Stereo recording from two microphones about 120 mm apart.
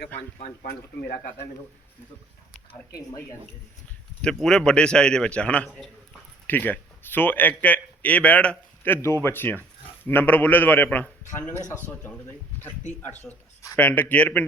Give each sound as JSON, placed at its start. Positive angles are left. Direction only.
{"t": 4.2, "sound": "a man's voice", "side_deg": 5}
{"t": 12.9, "sound": "a man's voice", "side_deg": 15}